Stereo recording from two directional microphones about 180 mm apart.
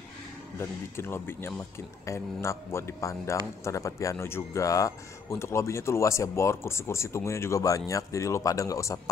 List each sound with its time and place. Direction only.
0.6 s speech: 15° left (ahead or behind)